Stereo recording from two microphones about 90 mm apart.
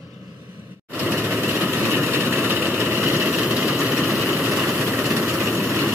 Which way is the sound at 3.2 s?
10° right (ahead or behind).